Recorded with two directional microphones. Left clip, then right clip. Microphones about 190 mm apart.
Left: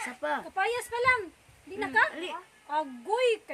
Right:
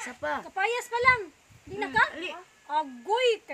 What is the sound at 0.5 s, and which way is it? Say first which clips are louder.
A woman's voice: right 4 dB; 30° right (ahead or behind).